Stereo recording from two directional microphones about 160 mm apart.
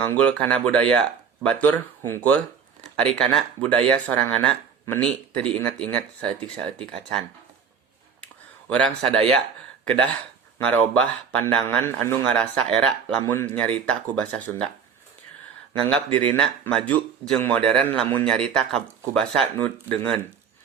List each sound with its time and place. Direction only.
0.0 s speech: 10° left (ahead or behind)
9.0 s speech: 5° left (ahead or behind)
10.6 s speech: 10° left (ahead or behind)
16.1 s speech: 5° left (ahead or behind)